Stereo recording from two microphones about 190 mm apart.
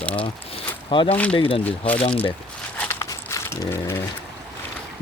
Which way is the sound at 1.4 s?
30° left (ahead or behind).